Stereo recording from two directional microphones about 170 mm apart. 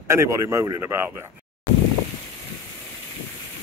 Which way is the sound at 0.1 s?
15° right (ahead or behind).